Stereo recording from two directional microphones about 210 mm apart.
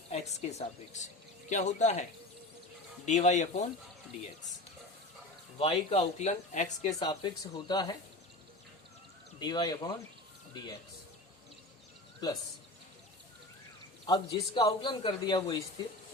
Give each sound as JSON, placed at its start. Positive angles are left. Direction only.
{"t": 0.1, "sound": "speech", "side_deg": 30}
{"t": 3.1, "sound": "speech", "side_deg": 35}
{"t": 5.5, "sound": "speech", "side_deg": 30}
{"t": 7.0, "sound": "a man's voice", "side_deg": 20}
{"t": 9.4, "sound": "a man's voice", "side_deg": 20}
{"t": 14.1, "sound": "a man's voice", "side_deg": 20}